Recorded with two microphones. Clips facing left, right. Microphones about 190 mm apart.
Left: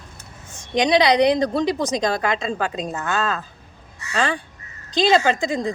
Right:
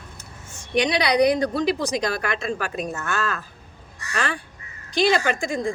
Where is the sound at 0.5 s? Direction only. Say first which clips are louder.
Left 4 dB; 20° left (ahead or behind).